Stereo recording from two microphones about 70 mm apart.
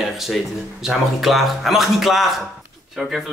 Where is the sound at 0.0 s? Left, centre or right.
Centre.